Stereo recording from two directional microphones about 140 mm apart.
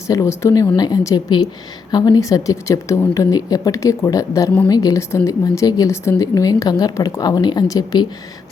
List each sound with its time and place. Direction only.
0.1 s a woman's voice: 25° left (ahead or behind)